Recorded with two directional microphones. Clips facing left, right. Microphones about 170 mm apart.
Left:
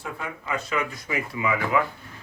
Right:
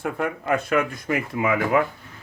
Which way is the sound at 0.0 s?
55° right (ahead or behind).